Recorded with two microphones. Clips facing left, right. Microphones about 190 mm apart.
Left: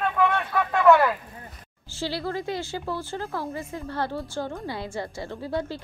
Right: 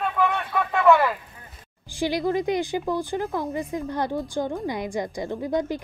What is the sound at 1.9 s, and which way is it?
A woman's voice, 15° right (ahead or behind).